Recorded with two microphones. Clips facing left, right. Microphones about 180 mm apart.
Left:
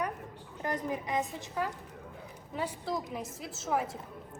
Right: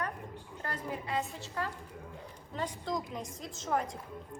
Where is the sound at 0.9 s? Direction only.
15° left (ahead or behind).